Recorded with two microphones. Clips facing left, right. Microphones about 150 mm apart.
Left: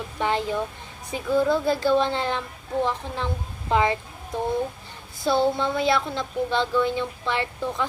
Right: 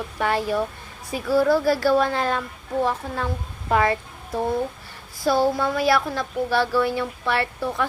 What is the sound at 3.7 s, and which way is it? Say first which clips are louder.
Speech: right 1 dB; 20° left (ahead or behind).